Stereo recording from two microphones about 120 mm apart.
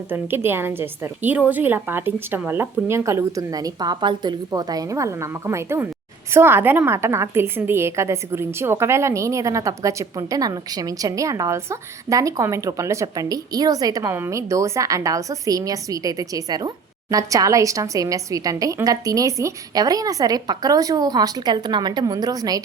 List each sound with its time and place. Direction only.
0.1 s a woman's voice: 20° right (ahead or behind)